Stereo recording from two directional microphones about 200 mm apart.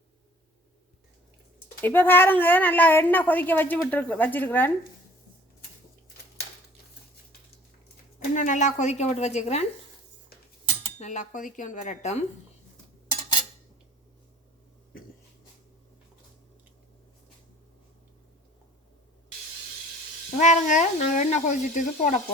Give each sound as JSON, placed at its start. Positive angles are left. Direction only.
{"t": 1.8, "sound": "a woman's voice", "side_deg": 10}
{"t": 8.2, "sound": "speech", "side_deg": 40}
{"t": 10.9, "sound": "speech", "side_deg": 35}
{"t": 20.4, "sound": "speech", "side_deg": 35}